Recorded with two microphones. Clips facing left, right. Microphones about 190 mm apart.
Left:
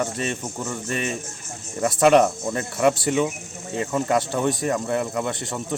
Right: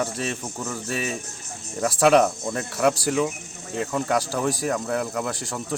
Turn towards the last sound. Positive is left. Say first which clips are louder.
# left 2 dB
turn(degrees=0)  # may be behind; listen again after turning